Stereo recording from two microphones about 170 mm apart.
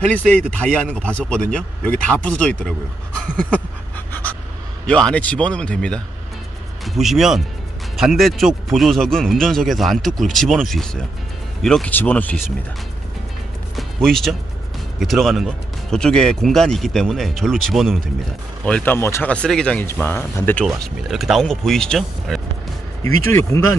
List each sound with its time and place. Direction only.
0.8 s speech: 5° left (ahead or behind)
4.1 s a sound: 10° left (ahead or behind)
4.8 s speech: 5° left (ahead or behind)
13.7 s speech: centre (ahead or behind)
20.6 s speech: centre (ahead or behind)
23.0 s speech: 15° left (ahead or behind)